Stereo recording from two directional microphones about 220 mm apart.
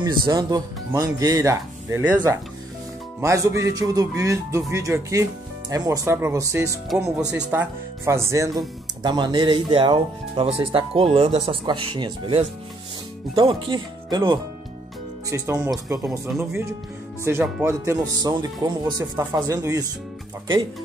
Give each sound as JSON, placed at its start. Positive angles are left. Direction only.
{"t": 0.0, "sound": "speech", "side_deg": -20}
{"t": 3.2, "sound": "speech", "side_deg": -15}
{"t": 6.9, "sound": "speech", "side_deg": 0}